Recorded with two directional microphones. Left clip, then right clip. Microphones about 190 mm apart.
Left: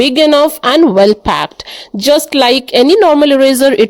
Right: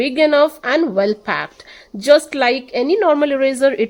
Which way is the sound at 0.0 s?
35° left (ahead or behind).